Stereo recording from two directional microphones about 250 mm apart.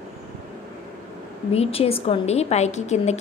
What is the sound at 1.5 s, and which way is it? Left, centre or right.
A woman's voice, left.